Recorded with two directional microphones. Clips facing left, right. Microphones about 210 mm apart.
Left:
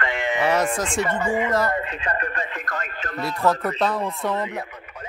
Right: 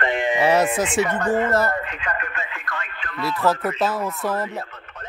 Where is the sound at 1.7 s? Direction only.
30° left (ahead or behind).